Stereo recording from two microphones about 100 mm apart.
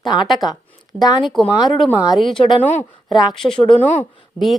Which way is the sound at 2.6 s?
20° left (ahead or behind).